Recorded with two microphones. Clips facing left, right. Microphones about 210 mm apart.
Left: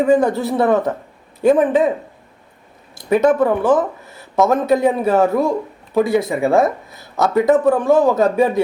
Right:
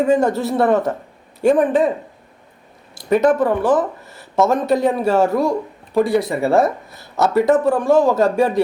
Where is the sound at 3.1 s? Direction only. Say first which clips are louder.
Left 1 dB; centre (ahead or behind).